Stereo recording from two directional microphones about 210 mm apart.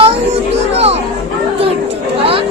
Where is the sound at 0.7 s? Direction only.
30° right (ahead or behind).